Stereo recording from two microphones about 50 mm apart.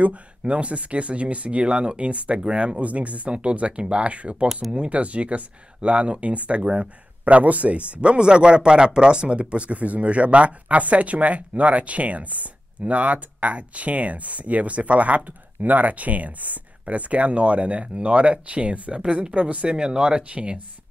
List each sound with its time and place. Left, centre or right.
0.0 s speech: right
4.5 s speech: centre
4.7 s speech: right